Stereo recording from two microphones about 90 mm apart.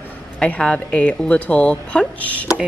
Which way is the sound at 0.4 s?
10° left (ahead or behind).